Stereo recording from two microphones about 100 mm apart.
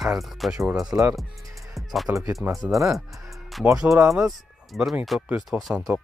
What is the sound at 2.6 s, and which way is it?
Speech, 35° right (ahead or behind).